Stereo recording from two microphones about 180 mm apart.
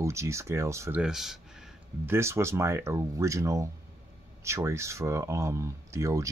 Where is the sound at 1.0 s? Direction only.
Centre (ahead or behind).